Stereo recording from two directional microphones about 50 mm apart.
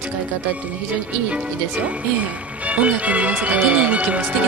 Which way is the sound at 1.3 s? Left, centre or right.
Right.